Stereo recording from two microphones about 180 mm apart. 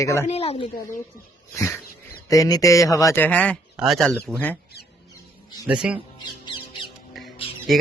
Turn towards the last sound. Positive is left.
turn(degrees=0)  # may be behind; listen again after turning